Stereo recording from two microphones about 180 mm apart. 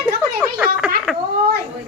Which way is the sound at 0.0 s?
5° right (ahead or behind).